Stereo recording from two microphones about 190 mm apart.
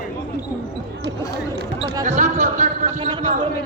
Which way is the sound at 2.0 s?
40° right (ahead or behind).